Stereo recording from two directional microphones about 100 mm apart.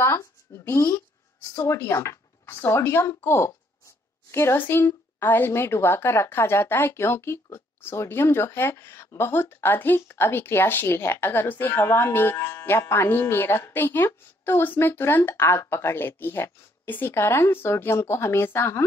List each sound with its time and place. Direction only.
0.0 s a woman's voice: 25° left (ahead or behind)